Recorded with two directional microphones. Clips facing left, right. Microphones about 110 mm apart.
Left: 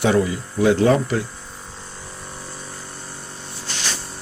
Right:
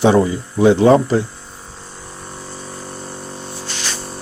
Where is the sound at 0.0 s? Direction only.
30° right (ahead or behind).